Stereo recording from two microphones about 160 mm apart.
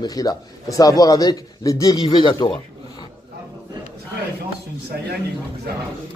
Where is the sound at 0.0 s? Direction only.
25° left (ahead or behind).